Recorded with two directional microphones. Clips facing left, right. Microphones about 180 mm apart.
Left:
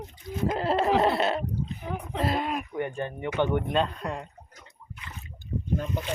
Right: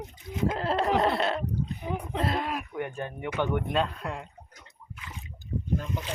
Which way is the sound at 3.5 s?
Centre (ahead or behind).